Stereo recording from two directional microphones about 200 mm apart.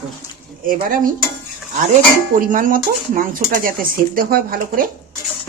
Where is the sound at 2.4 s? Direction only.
45° right (ahead or behind).